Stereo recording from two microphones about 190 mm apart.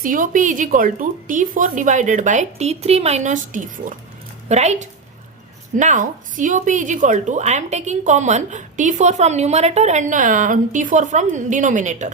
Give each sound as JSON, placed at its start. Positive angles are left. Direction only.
{"t": 0.0, "sound": "a woman's voice", "side_deg": -45}